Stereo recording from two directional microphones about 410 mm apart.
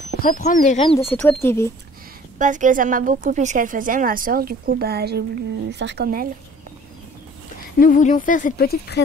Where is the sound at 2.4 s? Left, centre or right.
Centre.